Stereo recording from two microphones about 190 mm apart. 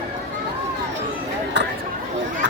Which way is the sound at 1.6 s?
65° right (ahead or behind).